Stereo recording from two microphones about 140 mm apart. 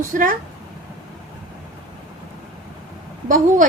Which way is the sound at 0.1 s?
75° right (ahead or behind).